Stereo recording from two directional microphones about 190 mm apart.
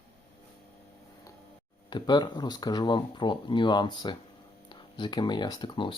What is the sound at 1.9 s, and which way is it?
Speech, 25° left (ahead or behind).